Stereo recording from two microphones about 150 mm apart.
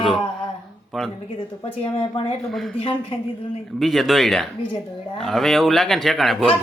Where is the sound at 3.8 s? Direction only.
Centre (ahead or behind).